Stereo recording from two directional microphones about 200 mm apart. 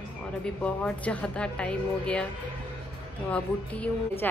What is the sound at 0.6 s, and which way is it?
A woman's voice, 5° left (ahead or behind).